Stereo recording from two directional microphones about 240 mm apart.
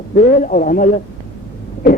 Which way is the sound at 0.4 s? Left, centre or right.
Left.